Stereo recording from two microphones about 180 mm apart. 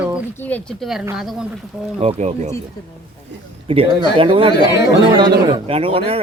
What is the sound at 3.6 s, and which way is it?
A man's voice, 30° right (ahead or behind).